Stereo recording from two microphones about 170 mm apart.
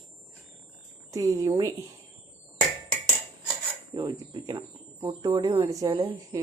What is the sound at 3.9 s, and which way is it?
A woman's voice, 25° right (ahead or behind).